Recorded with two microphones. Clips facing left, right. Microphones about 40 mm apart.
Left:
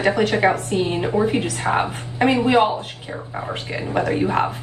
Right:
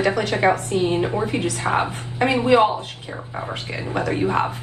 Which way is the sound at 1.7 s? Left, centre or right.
Centre.